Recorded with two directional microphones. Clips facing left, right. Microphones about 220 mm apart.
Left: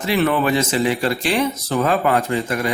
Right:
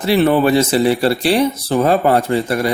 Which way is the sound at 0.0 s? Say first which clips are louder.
Right 5 dB; 35° right (ahead or behind).